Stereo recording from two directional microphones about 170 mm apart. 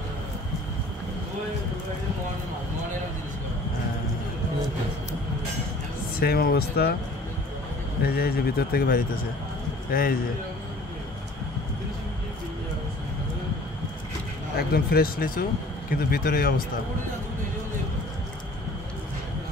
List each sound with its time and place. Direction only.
6.1 s speech: 60° left (ahead or behind)
8.0 s a man's voice: 65° left (ahead or behind)
14.7 s speech: 65° left (ahead or behind)